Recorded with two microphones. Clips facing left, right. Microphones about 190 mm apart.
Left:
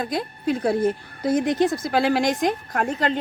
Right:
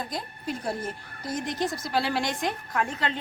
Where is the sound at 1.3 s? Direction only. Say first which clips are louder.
Left 10 dB; 55° left (ahead or behind).